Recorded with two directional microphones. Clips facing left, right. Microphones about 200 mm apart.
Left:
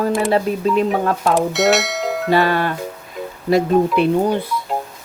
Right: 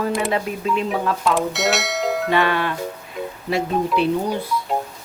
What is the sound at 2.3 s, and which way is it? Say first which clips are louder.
Music: left 5 dB; 40° left (ahead or behind).